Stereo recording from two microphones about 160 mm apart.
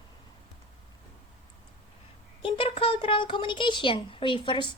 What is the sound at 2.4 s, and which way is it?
Speech, 35° left (ahead or behind).